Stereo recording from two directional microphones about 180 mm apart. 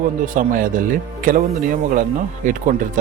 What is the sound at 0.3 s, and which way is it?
Speech, 50° right (ahead or behind).